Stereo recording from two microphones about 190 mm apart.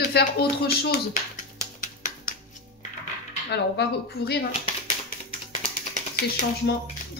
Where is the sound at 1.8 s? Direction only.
45° left (ahead or behind).